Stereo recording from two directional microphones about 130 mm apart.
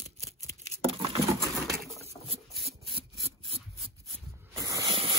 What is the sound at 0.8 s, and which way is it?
Patter, 45° right (ahead or behind).